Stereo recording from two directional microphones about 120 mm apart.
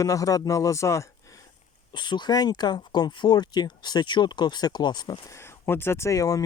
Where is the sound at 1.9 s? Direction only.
40° left (ahead or behind).